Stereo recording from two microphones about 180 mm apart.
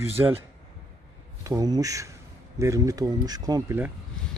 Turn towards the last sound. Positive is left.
turn(degrees=-20)  # may be behind; listen again after turning